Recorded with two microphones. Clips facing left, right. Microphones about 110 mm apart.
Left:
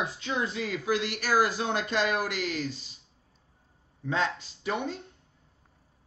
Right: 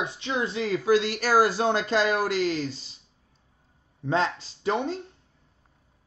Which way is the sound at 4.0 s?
30° right (ahead or behind).